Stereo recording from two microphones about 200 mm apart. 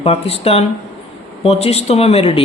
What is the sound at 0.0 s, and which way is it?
Speech, 30° left (ahead or behind).